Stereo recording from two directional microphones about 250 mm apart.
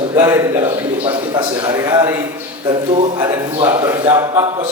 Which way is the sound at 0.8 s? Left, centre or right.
Right.